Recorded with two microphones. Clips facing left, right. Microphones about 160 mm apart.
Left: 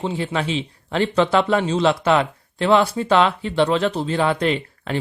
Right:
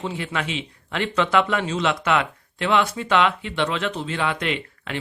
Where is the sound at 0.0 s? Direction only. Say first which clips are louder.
Left 4 dB; 30° left (ahead or behind).